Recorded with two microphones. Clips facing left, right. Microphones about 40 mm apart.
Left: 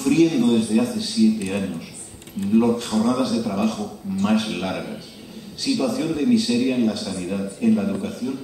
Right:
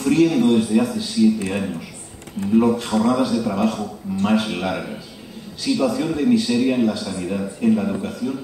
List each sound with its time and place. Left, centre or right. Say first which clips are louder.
0.0 s a man's voice: right 1 dB; centre